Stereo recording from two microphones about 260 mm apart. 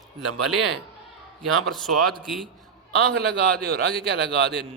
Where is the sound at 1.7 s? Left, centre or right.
Centre.